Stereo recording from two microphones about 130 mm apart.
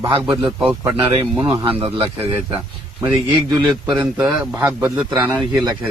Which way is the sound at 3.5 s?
30° right (ahead or behind).